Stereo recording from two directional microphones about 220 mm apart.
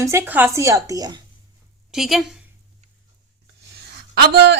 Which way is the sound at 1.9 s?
Centre (ahead or behind).